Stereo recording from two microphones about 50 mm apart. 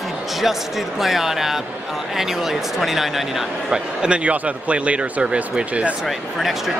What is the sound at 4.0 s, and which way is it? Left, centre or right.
Speech, right.